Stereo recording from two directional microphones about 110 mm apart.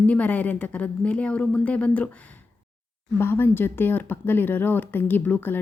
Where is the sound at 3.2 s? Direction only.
20° left (ahead or behind).